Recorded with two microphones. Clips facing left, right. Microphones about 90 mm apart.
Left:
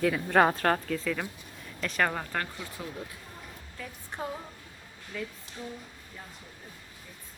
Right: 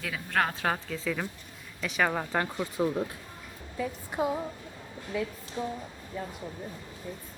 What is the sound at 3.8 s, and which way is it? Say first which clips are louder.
A woman's voice: right 8 dB; 10° right (ahead or behind).